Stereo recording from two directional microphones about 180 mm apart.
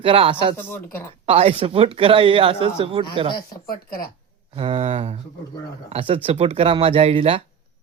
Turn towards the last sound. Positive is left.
turn(degrees=-35)  # may be behind; listen again after turning